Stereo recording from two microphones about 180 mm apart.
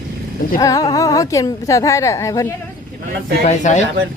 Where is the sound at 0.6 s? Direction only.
20° left (ahead or behind).